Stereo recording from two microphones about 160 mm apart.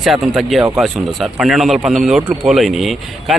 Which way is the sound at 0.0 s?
Centre (ahead or behind).